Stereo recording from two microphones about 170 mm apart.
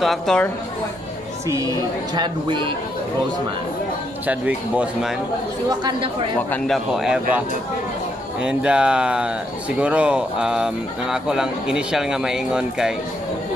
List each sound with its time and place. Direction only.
0.0 s speech: centre (ahead or behind)
1.5 s speech: 20° right (ahead or behind)
4.3 s speech: 10° right (ahead or behind)
5.7 s speech: 25° right (ahead or behind)
6.7 s speech: 5° right (ahead or behind)